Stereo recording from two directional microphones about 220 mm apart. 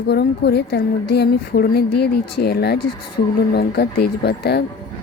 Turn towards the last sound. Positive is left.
turn(degrees=50)  # may be behind; listen again after turning